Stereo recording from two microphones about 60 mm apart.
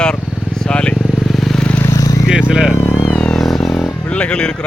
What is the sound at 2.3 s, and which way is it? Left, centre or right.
Vehicle, centre.